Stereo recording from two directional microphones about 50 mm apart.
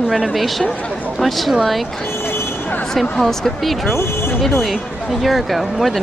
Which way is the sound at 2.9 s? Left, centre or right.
Centre.